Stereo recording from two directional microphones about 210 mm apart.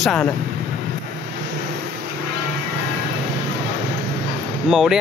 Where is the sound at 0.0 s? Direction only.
Centre (ahead or behind).